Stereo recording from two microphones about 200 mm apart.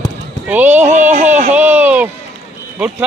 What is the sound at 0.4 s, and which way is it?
Speech, 10° right (ahead or behind).